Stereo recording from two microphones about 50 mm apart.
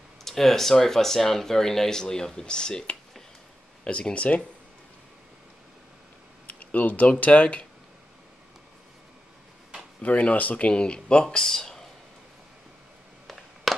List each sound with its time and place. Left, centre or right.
0.2 s speech: centre; by 4.5 s left
6.4 s speech: left
10.0 s speech: left
11.2 s speech: centre
13.7 s a sound: centre